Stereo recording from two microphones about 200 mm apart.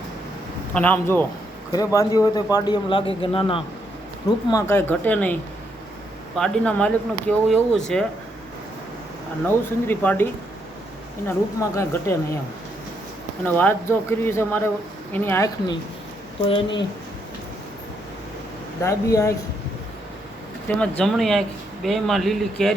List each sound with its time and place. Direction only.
0.7 s a man's voice: 10° left (ahead or behind); by 3.6 s 25° left (ahead or behind)
4.5 s speech: 10° left (ahead or behind)
9.5 s speech: 10° left (ahead or behind)
11.3 s speech: 15° left (ahead or behind)
13.4 s a man's voice: 10° left (ahead or behind)
18.8 s speech: 15° left (ahead or behind)
20.7 s speech: 5° left (ahead or behind)